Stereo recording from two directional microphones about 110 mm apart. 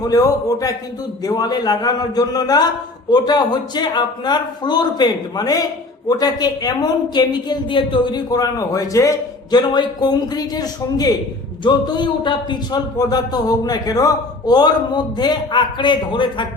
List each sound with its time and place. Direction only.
0.0 s speech: 35° left (ahead or behind)